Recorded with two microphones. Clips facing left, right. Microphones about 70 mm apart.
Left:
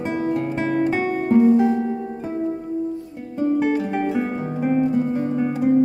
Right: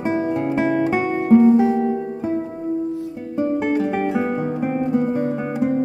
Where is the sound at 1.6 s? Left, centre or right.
Centre.